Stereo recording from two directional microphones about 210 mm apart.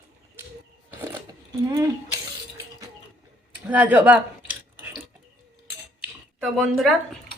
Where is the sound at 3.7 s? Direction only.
5° right (ahead or behind).